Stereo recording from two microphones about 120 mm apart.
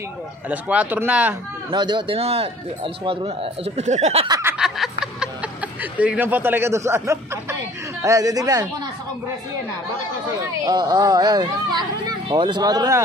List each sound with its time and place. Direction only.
0.5 s speech: 10° right (ahead or behind)
1.7 s speech: 40° right (ahead or behind)
2.1 s speech: 55° right (ahead or behind)
3.0 s speech: 45° right (ahead or behind)
3.3 s speech: 65° right (ahead or behind)
4.3 s speech: 20° right (ahead or behind)
4.6 s a sound: 5° right (ahead or behind); by 7.5 s 25° right (ahead or behind)
8.0 s speech: 30° right (ahead or behind)
10.4 s speech: 35° right (ahead or behind)